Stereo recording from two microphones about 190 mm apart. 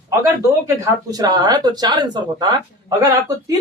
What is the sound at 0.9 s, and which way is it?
Speech, 20° right (ahead or behind).